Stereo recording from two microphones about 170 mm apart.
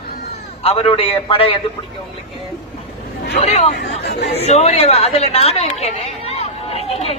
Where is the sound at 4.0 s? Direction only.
80° left.